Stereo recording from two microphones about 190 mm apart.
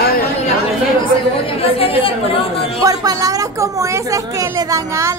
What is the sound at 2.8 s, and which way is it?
A woman's voice, 20° right (ahead or behind).